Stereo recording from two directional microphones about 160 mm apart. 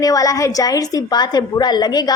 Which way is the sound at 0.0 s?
20° left (ahead or behind).